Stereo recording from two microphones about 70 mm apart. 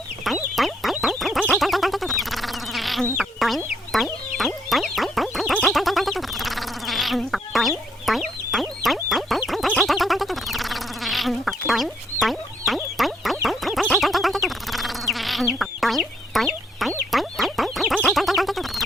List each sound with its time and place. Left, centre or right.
0.5 s a sound: centre
3.4 s chicken: centre
3.9 s fowl: centre
5.6 s a sound: centre
8.0 s fowl: centre
9.8 s insect: centre
11.7 s fowl: centre
13.9 s insect: centre
17.1 s fowl: centre
18.1 s a sound: centre